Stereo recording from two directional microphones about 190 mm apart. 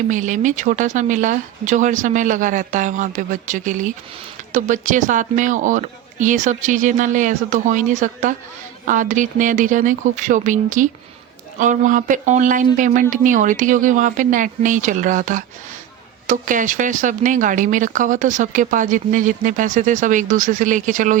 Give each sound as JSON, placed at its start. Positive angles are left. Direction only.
{"t": 0.1, "sound": "speech", "side_deg": -40}